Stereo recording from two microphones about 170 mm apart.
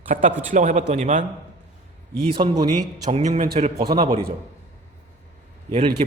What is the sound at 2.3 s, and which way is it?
Speech, 30° right (ahead or behind).